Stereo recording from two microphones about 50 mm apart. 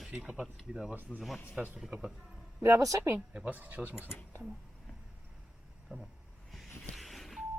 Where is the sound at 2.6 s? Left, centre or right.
Right.